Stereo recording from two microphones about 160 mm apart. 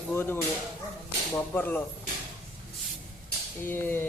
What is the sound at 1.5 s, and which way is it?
Speech, 10° left (ahead or behind).